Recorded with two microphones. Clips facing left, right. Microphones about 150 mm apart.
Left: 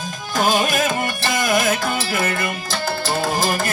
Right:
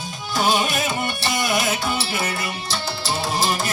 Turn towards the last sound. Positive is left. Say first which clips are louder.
# left 2 dB
turn(degrees=50)  # may be behind; listen again after turning